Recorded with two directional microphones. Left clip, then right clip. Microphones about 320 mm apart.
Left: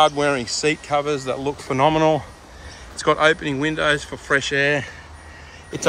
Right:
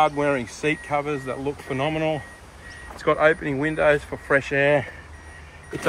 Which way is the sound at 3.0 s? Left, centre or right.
Centre.